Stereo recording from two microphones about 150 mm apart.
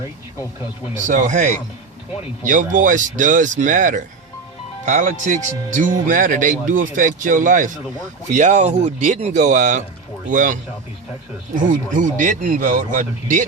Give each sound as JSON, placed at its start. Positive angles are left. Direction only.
{"t": 1.0, "sound": "speech", "side_deg": -60}
{"t": 11.7, "sound": "speech", "side_deg": -60}